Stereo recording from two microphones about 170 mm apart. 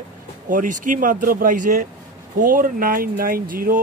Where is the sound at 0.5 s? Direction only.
50° right (ahead or behind).